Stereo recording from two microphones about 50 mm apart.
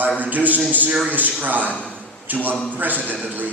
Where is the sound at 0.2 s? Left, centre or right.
Right.